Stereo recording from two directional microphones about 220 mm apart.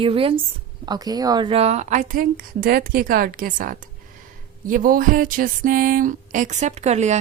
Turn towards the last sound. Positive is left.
turn(degrees=-30)  # may be behind; listen again after turning